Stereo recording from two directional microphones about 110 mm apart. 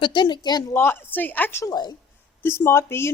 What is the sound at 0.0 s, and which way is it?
Speech, 45° left (ahead or behind).